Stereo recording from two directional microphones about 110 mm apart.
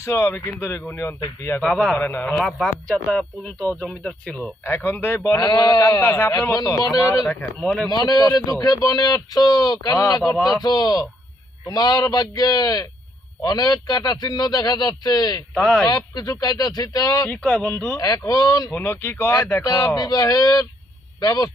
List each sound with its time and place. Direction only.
0.0 s speech: 20° left (ahead or behind)
1.6 s a man's voice: 5° left (ahead or behind)
2.0 s speech: 20° left (ahead or behind)
2.3 s speech: 5° left (ahead or behind)
4.6 s speech: 20° left (ahead or behind)
7.3 s speech: 10° left (ahead or behind)
7.9 s speech: 35° left (ahead or behind)
17.2 s speech: 10° left (ahead or behind)
17.9 s speech: 30° left (ahead or behind)
18.8 s speech: 20° left (ahead or behind)